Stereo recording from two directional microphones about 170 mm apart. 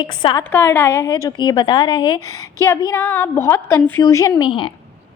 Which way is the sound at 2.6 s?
15° left (ahead or behind).